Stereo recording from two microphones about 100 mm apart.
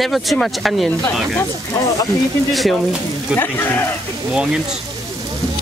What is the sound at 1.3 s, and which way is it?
Speech, 30° left (ahead or behind).